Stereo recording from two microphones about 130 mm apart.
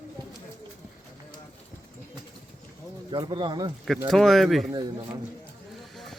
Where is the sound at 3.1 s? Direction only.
35° right (ahead or behind).